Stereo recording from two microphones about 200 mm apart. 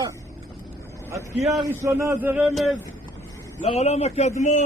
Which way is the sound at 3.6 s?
35° left (ahead or behind).